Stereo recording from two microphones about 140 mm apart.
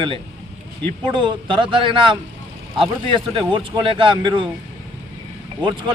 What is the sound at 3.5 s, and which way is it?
Speech, 40° right (ahead or behind).